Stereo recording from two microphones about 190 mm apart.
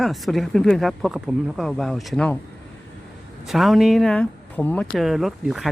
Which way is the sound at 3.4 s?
Centre (ahead or behind).